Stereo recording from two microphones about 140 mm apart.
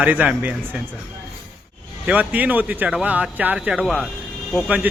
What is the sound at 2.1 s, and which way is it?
A man's voice, 10° right (ahead or behind).